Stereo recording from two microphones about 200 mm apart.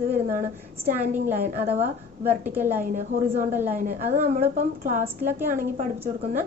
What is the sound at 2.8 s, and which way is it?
A woman's voice, 45° right (ahead or behind).